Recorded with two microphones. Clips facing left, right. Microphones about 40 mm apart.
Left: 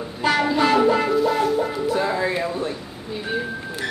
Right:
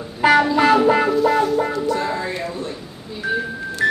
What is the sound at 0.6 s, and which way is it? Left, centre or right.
Music, centre.